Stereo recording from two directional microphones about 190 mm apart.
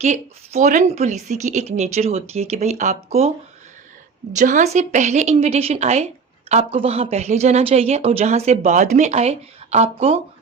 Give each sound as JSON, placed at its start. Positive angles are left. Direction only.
{"t": 0.0, "sound": "a woman's voice", "side_deg": -35}
{"t": 4.4, "sound": "a woman's voice", "side_deg": -40}